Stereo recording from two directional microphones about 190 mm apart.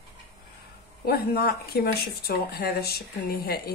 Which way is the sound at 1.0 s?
55° left (ahead or behind).